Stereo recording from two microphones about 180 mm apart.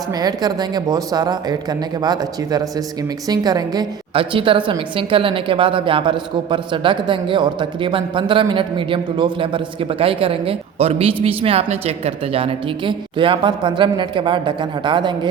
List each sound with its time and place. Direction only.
0.1 s a woman's voice: 20° right (ahead or behind)